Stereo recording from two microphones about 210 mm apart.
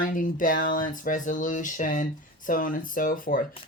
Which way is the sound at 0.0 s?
40° left (ahead or behind).